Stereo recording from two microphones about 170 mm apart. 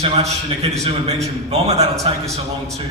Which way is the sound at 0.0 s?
40° right (ahead or behind).